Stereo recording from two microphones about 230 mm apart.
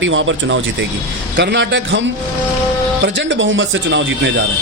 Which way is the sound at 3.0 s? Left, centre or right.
Right.